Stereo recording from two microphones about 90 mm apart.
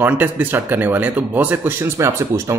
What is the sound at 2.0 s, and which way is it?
Speech, 35° right (ahead or behind).